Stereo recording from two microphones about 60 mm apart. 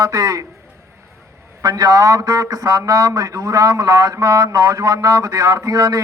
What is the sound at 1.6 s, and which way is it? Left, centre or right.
A man's voice, right.